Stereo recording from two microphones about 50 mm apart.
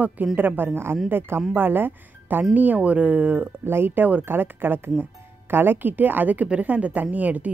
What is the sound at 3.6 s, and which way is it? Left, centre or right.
Speech, right.